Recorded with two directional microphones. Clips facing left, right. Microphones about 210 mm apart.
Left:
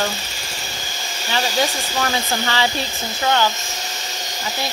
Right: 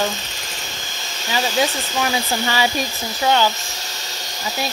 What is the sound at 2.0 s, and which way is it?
Hair dryer, 10° right (ahead or behind).